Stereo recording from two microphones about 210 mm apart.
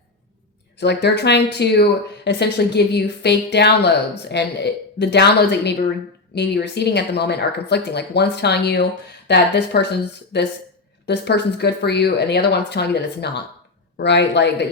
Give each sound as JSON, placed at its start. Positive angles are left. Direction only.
{"t": 0.8, "sound": "speech", "side_deg": 55}